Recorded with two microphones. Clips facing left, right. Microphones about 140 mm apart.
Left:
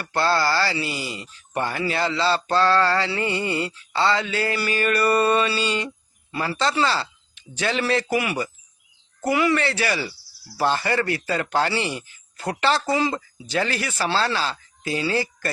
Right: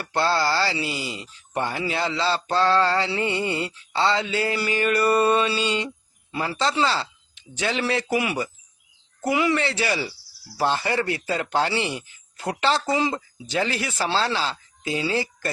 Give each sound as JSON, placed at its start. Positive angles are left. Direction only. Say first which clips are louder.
{"t": 0.1, "sound": "speech", "louder": "left 1 dB", "side_deg": -20}
{"t": 9.2, "sound": "speech", "louder": "left 1 dB", "side_deg": -20}